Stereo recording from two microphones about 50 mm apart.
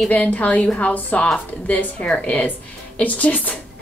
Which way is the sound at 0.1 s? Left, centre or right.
Left.